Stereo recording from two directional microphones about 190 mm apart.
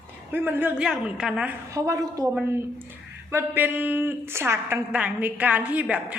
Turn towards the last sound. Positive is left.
turn(degrees=-5)  # may be behind; listen again after turning